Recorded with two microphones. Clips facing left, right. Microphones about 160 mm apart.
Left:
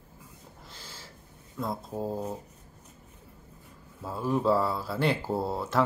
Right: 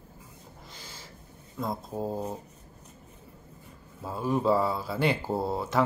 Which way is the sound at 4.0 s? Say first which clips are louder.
Right 1 dB; 20° right (ahead or behind).